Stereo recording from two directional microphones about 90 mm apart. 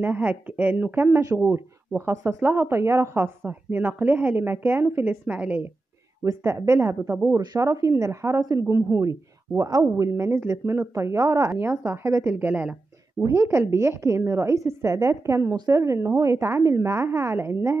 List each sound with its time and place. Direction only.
0.0 s a woman's voice: 20° right (ahead or behind)
6.2 s a woman's voice: 35° right (ahead or behind)
7.3 s speech: 40° right (ahead or behind)
9.6 s speech: 45° right (ahead or behind)
12.4 s a woman's voice: 20° right (ahead or behind)
13.2 s a woman's voice: 30° right (ahead or behind)